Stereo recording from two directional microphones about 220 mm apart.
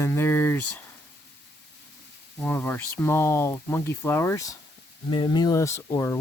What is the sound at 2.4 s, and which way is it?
Speech, 10° left (ahead or behind).